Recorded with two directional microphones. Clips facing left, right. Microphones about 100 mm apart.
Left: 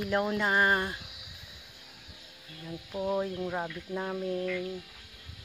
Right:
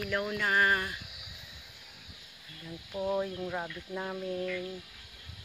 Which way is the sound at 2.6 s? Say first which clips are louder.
Left 1 dB; 10° left (ahead or behind).